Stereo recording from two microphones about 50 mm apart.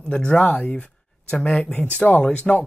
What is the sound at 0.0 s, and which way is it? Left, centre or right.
Speech, centre.